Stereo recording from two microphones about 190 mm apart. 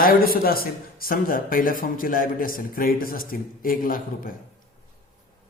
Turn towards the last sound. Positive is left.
turn(degrees=50)  # may be behind; listen again after turning